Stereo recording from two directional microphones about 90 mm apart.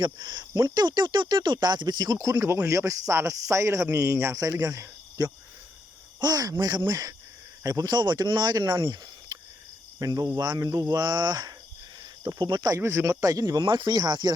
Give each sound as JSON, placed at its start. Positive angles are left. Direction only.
{"t": 0.0, "sound": "speech", "side_deg": -55}
{"t": 2.3, "sound": "speech", "side_deg": -25}
{"t": 7.9, "sound": "speech", "side_deg": -50}
{"t": 10.0, "sound": "speech", "side_deg": -40}
{"t": 10.8, "sound": "speech", "side_deg": -55}
{"t": 12.8, "sound": "speech", "side_deg": -35}
{"t": 13.7, "sound": "speech", "side_deg": -55}